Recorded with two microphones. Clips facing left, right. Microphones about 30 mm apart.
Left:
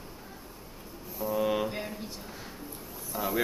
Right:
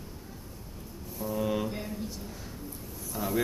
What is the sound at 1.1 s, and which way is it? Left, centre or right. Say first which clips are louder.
Mantra: left 2 dB; centre.